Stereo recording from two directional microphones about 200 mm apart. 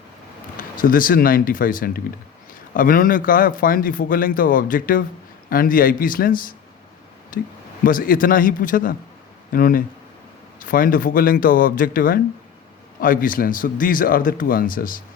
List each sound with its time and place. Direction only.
0.5 s speech: 45° left (ahead or behind)